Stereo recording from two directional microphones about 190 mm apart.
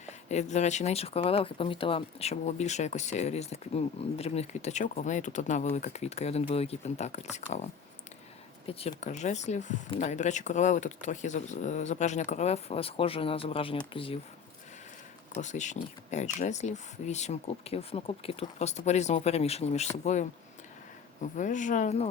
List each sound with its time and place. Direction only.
0.0 s speech: 35° left (ahead or behind)
8.6 s speech: 30° left (ahead or behind)
15.4 s speech: 40° left (ahead or behind)
21.3 s speech: 40° left (ahead or behind)